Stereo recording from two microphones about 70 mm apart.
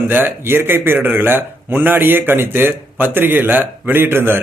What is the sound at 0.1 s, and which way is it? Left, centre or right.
Speech, right.